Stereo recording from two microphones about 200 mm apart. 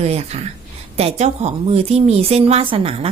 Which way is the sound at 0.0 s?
30° right (ahead or behind).